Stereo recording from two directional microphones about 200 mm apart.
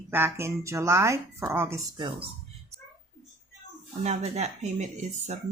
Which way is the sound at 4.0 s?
35° right (ahead or behind).